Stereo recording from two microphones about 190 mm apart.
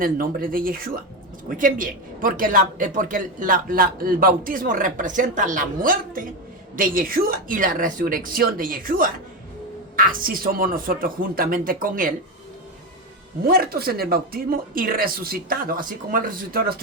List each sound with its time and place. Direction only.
0.0 s a man's voice: 50° right (ahead or behind)
13.5 s a man's voice: 55° right (ahead or behind)